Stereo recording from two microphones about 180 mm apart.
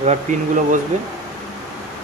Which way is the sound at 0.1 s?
45° right (ahead or behind).